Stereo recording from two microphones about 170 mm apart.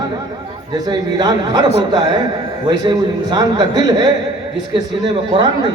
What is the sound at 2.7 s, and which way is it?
Speech, 25° right (ahead or behind).